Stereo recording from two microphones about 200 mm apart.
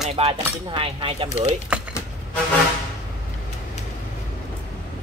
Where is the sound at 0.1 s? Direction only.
25° right (ahead or behind).